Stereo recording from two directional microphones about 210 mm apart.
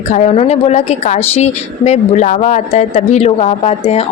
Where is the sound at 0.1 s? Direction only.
30° left (ahead or behind).